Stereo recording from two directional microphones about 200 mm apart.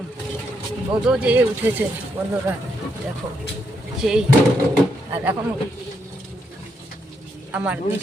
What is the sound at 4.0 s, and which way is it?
Speech, 5° right (ahead or behind).